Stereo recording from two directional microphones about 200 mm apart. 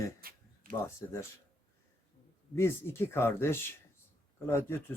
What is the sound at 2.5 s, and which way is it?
Speech, 10° left (ahead or behind).